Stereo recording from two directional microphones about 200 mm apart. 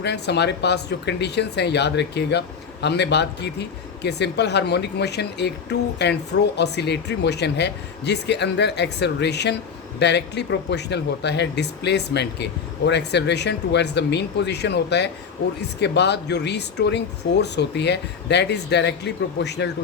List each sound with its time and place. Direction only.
0.0 s speech: 55° left (ahead or behind)